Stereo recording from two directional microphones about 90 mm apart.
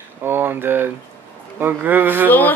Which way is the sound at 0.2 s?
25° right (ahead or behind).